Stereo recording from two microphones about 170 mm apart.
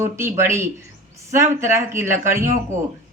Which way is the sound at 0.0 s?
15° right (ahead or behind).